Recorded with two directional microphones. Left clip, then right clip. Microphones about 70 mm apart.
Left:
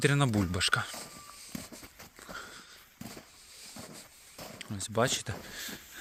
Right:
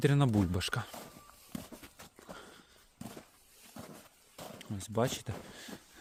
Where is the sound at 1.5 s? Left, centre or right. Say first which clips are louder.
Left 1 dB; centre.